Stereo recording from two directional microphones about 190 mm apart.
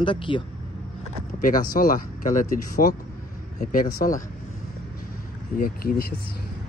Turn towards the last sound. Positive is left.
turn(degrees=50)  # may be behind; listen again after turning